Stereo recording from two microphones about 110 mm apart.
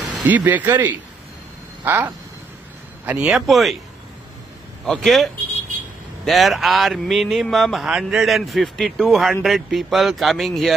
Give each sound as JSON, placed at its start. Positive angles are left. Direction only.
{"t": 0.2, "sound": "speech", "side_deg": -15}
{"t": 3.1, "sound": "speech", "side_deg": -5}
{"t": 4.8, "sound": "speech", "side_deg": 5}